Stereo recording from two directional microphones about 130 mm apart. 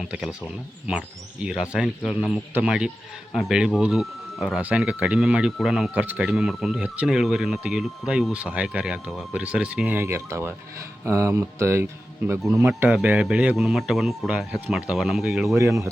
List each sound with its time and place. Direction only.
0.0 s speech: 5° right (ahead or behind)
15.4 s speech: 20° right (ahead or behind)